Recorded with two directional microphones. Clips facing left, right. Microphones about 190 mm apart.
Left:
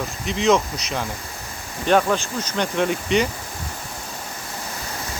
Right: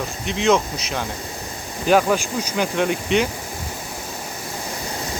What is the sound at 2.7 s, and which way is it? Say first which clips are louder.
Speech: even; centre (ahead or behind).